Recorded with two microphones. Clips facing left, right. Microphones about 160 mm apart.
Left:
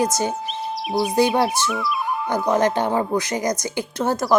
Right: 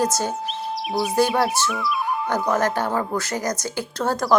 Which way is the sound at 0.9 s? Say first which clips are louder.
Left 2 dB; centre (ahead or behind).